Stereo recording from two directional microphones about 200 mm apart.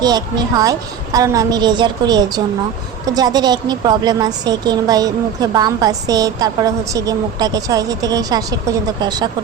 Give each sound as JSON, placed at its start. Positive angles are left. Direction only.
{"t": 0.0, "sound": "a woman's voice", "side_deg": -20}